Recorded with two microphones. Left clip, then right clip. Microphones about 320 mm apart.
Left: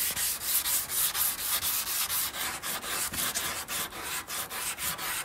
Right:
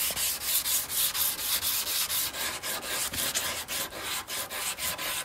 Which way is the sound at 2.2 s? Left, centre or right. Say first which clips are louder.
Right 1 dB; centre.